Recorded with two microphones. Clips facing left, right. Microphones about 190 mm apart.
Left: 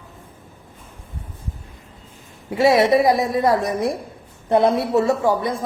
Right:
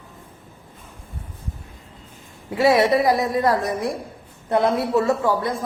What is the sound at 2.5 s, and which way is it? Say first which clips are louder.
A woman's voice: left 2 dB; 25° left (ahead or behind).